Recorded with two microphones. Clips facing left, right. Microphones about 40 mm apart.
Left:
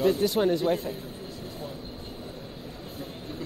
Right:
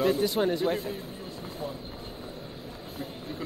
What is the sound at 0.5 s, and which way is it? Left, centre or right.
Speech, centre.